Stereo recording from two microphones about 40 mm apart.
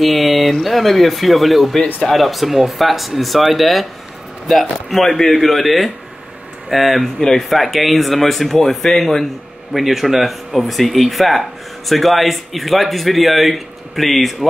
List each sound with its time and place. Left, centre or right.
0.0 s speech: centre
7.2 s speech: centre
7.4 s speech: centre
9.7 s speech: centre